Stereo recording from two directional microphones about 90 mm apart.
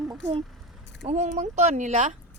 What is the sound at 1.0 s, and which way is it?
Speech, 90° right.